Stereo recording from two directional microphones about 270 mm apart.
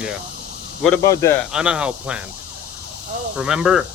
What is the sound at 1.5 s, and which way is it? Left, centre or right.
Speech, centre.